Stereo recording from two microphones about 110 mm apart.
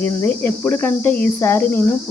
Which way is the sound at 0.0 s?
15° left (ahead or behind).